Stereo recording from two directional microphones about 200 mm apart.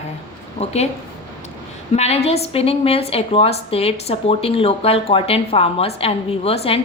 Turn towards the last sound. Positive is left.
turn(degrees=30)  # may be behind; listen again after turning